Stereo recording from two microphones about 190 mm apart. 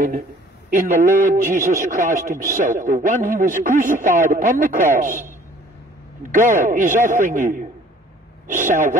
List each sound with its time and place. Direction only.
0.7 s a man's voice: 45° right (ahead or behind)
6.3 s a man's voice: 45° right (ahead or behind)